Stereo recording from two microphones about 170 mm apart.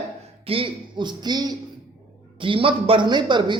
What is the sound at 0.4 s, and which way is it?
Speech, 30° right (ahead or behind).